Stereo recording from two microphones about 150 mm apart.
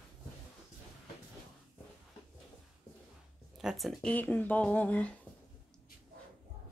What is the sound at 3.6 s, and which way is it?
Speech, centre (ahead or behind).